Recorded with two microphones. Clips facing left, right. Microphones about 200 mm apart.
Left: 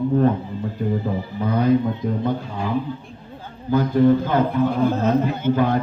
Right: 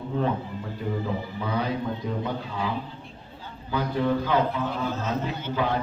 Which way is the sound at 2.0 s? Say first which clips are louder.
Left 6 dB; 50° left (ahead or behind).